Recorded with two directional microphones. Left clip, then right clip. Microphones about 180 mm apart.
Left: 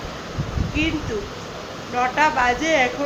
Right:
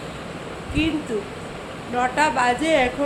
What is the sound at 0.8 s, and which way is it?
Speech, 15° right (ahead or behind).